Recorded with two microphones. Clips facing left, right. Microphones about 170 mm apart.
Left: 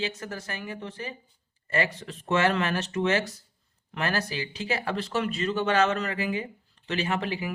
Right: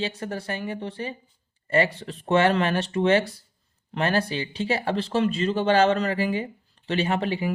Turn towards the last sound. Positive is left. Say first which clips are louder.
# right 4 dB
turn(degrees=-30)  # may be behind; listen again after turning